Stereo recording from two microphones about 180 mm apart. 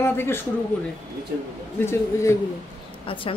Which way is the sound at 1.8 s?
15° left (ahead or behind).